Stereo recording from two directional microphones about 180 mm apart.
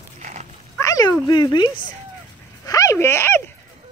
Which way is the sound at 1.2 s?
25° left (ahead or behind).